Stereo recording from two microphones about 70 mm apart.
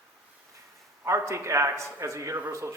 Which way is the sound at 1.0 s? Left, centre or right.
Right.